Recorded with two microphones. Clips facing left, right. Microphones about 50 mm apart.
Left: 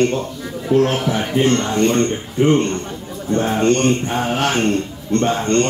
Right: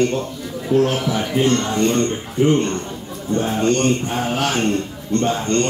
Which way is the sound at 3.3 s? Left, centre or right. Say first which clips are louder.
Left 2 dB; left.